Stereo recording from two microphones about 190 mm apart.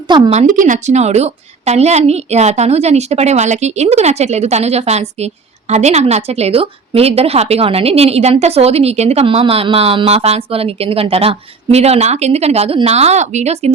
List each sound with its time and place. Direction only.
0.1 s speech: 25° right (ahead or behind)
0.3 s a woman's voice: 45° right (ahead or behind)